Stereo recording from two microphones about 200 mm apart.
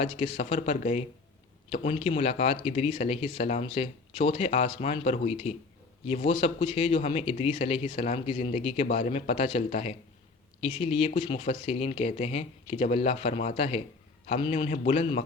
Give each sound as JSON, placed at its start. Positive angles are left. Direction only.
{"t": 0.0, "sound": "speech", "side_deg": 30}